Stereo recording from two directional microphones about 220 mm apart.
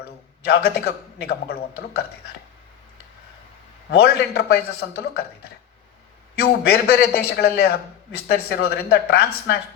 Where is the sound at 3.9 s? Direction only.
45° left (ahead or behind).